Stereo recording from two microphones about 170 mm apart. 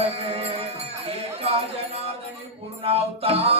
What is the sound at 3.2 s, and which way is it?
Music, 35° right (ahead or behind).